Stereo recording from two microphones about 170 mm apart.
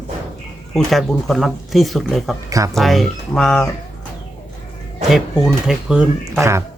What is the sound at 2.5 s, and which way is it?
Speech, 20° right (ahead or behind).